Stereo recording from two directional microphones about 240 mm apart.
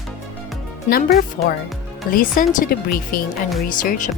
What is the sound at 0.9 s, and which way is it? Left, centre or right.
Speech, left.